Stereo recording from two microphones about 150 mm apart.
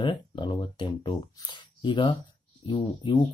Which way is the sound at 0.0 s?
30° left (ahead or behind).